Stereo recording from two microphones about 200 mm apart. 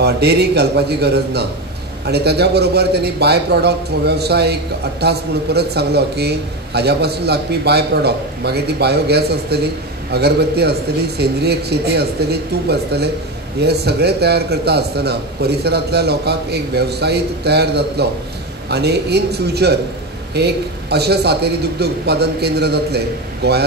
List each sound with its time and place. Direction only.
0.0 s a man's voice: 55° right (ahead or behind)